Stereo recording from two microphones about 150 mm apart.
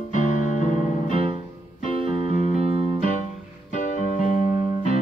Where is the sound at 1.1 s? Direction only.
40° right (ahead or behind).